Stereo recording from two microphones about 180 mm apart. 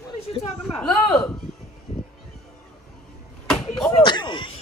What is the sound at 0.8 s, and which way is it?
Speech, centre (ahead or behind).